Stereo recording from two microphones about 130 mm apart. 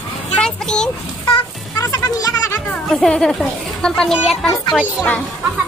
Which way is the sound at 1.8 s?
30° left (ahead or behind).